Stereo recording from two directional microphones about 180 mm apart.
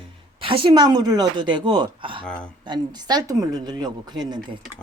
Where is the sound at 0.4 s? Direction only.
30° right (ahead or behind).